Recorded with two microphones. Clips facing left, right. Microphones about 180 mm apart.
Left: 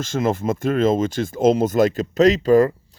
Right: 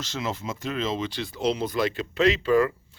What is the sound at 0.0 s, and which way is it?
Speech, 50° left (ahead or behind).